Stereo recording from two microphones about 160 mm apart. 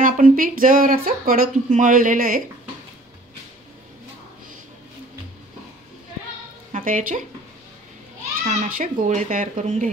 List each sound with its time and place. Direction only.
0.0 s speech: 60° right (ahead or behind)
6.7 s a woman's voice: 55° right (ahead or behind)
8.5 s speech: 60° right (ahead or behind)